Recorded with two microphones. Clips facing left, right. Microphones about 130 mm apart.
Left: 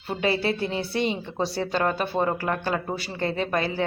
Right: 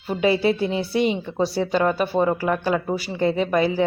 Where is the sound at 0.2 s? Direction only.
15° right (ahead or behind).